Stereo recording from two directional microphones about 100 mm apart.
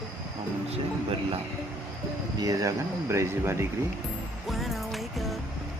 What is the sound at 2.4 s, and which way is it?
Speech, 35° right (ahead or behind).